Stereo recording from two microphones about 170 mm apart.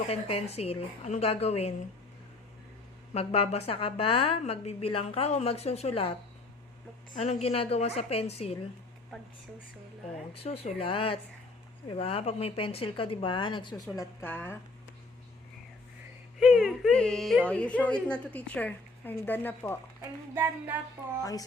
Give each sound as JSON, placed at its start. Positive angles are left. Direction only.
{"t": 0.1, "sound": "a woman's voice", "side_deg": 35}
{"t": 3.1, "sound": "a woman's voice", "side_deg": 35}
{"t": 7.2, "sound": "a woman's voice", "side_deg": 40}
{"t": 10.3, "sound": "a woman's voice", "side_deg": 35}
{"t": 13.8, "sound": "speech", "side_deg": 15}
{"t": 16.4, "sound": "speech", "side_deg": -5}
{"t": 20.3, "sound": "child singing", "side_deg": -15}